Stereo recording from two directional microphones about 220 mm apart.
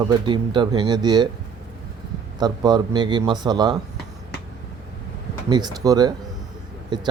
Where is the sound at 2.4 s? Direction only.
20° right (ahead or behind).